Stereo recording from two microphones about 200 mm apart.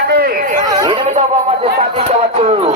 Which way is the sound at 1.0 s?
30° right (ahead or behind).